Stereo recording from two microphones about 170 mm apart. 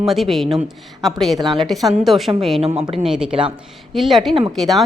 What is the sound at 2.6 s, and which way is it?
Speech, 35° right (ahead or behind).